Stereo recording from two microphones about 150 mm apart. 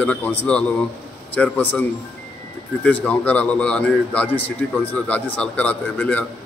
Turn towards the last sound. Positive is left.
turn(degrees=10)  # may be behind; listen again after turning